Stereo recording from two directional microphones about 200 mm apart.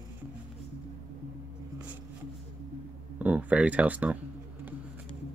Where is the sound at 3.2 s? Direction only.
5° right (ahead or behind).